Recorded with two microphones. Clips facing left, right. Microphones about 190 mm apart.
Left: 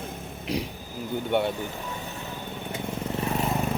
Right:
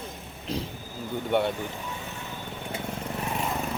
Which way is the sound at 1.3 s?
Centre (ahead or behind).